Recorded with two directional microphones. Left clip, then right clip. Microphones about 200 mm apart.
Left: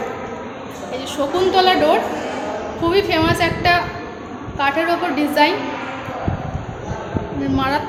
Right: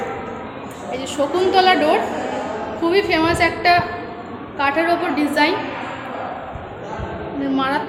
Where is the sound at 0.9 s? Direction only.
5° right (ahead or behind).